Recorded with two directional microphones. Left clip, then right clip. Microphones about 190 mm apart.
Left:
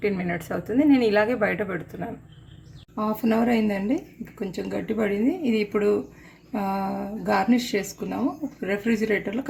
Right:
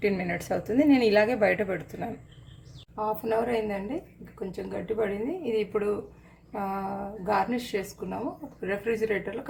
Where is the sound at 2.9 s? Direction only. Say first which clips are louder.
Left 2 dB; 30° left (ahead or behind).